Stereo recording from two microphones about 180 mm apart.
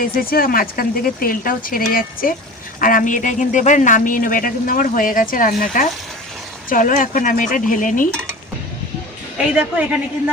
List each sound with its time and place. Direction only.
0.0 s speech: 55° left (ahead or behind)
9.4 s a woman's voice: 5° right (ahead or behind)